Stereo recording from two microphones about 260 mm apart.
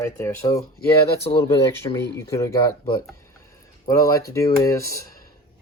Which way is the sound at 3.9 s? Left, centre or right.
Centre.